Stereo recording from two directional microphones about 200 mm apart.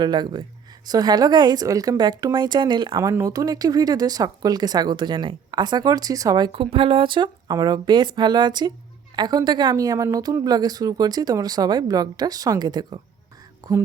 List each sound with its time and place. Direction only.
0.0 s a woman's voice: 20° right (ahead or behind)